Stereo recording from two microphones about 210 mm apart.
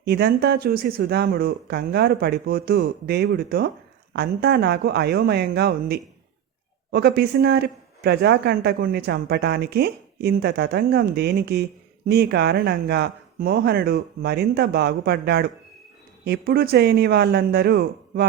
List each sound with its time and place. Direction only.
0.0 s speech: 50° right (ahead or behind)